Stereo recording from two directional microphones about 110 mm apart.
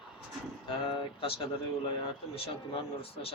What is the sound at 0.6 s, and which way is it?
Speech, 55° left (ahead or behind).